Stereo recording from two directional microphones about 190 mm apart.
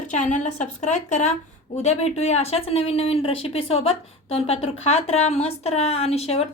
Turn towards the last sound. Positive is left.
turn(degrees=35)  # may be behind; listen again after turning